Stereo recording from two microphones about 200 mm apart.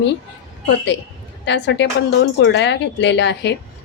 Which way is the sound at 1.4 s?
60° left (ahead or behind).